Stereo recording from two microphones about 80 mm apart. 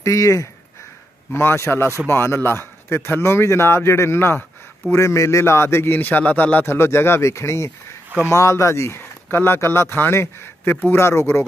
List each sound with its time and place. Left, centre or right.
0.0 s speech: left
1.3 s speech: left